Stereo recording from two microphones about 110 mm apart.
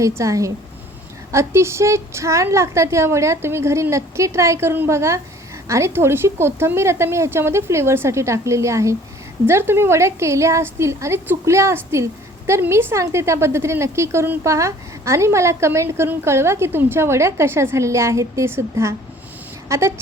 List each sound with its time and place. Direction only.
0.2 s a woman's voice: 30° right (ahead or behind)